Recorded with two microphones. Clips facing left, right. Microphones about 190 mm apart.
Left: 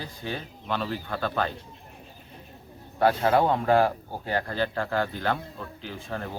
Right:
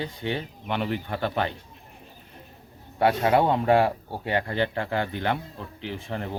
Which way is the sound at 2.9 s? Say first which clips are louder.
Right 1 dB; 20° right (ahead or behind).